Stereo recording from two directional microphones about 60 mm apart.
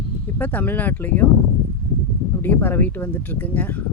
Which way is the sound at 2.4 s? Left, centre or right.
Left.